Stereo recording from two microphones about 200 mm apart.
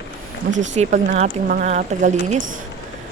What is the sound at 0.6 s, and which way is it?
A woman's voice, 35° right (ahead or behind).